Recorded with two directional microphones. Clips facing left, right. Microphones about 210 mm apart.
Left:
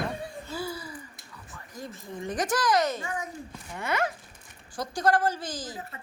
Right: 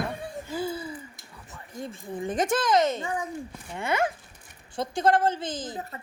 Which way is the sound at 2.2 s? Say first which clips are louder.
Right 2 dB; 25° right (ahead or behind).